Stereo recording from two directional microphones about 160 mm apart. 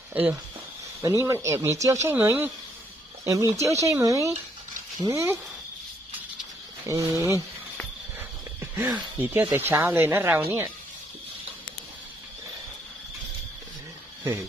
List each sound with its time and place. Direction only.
0.1 s speech: 10° right (ahead or behind)
6.8 s speech: 20° right (ahead or behind)
8.7 s speech: 10° right (ahead or behind)